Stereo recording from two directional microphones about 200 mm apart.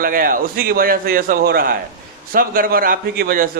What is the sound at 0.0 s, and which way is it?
A man's voice, 45° right (ahead or behind).